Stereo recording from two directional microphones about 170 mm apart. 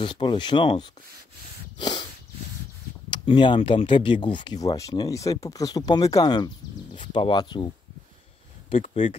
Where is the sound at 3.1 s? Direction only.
30° left (ahead or behind).